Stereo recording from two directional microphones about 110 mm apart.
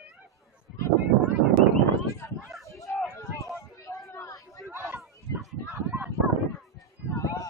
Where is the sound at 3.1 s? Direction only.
25° left (ahead or behind).